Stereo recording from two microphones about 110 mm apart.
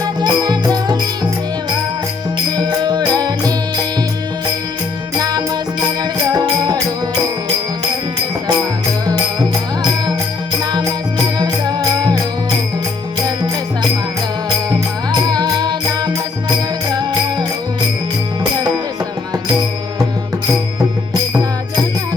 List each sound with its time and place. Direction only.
0.0 s music: 40° right (ahead or behind)
2.6 s music: 40° right (ahead or behind)
5.1 s music: 35° right (ahead or behind)
10.6 s music: 40° right (ahead or behind)
14.7 s music: 40° right (ahead or behind)